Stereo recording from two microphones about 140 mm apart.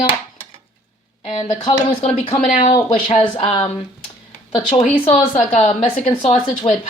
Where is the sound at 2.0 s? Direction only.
45° left (ahead or behind).